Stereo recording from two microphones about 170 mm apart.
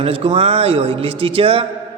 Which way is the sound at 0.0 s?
30° right (ahead or behind).